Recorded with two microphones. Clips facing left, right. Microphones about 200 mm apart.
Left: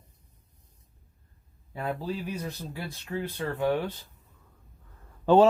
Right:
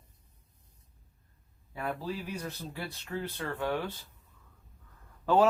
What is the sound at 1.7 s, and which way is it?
Speech, 20° left (ahead or behind).